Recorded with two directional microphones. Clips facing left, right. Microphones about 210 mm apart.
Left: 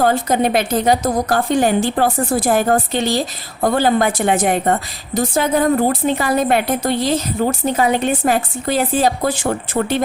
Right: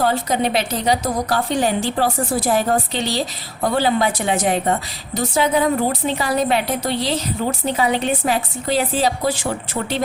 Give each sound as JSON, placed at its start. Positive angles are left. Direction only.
{"t": 0.0, "sound": "a woman's voice", "side_deg": 50}